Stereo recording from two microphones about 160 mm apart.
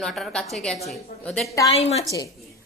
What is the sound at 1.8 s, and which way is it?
Speech, 40° left (ahead or behind).